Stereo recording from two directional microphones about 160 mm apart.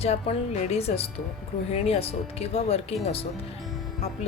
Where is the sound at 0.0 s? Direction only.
40° left (ahead or behind).